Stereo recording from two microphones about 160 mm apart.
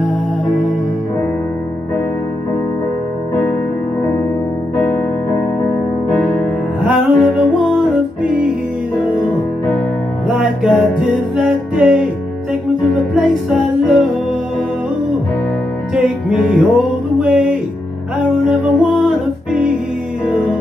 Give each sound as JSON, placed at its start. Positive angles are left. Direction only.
{"t": 4.7, "sound": "music", "side_deg": 15}
{"t": 6.8, "sound": "music", "side_deg": 0}
{"t": 10.2, "sound": "music", "side_deg": -5}
{"t": 13.1, "sound": "music", "side_deg": 0}
{"t": 15.9, "sound": "music", "side_deg": -5}
{"t": 18.8, "sound": "music", "side_deg": -5}